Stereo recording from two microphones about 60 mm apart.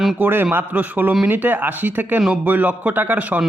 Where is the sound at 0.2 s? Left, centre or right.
Right.